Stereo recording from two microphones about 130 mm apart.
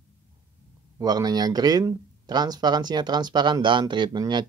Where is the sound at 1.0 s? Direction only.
30° right (ahead or behind).